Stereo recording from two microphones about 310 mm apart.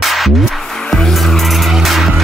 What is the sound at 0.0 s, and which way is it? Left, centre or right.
Vehicle, centre.